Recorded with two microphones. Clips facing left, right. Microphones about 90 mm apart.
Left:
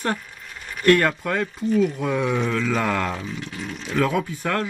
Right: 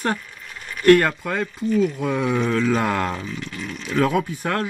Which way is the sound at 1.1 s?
10° right (ahead or behind).